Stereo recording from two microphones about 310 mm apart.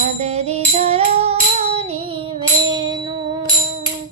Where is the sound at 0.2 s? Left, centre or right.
Right.